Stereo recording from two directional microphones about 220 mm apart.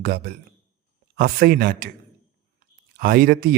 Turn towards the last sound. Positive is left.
turn(degrees=-40)  # may be behind; listen again after turning